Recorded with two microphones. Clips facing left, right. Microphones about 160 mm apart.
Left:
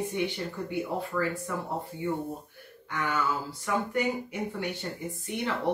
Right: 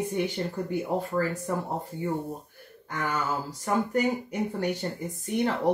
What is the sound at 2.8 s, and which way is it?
Speech, 40° right (ahead or behind).